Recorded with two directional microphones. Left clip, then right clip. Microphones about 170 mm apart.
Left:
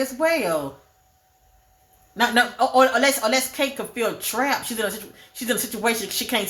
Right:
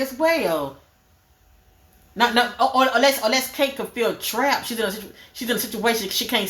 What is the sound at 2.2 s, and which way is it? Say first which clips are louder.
Speech: right 1 dB; 20° left (ahead or behind).